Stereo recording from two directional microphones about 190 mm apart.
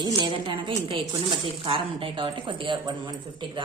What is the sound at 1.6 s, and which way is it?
A woman's voice, 25° right (ahead or behind).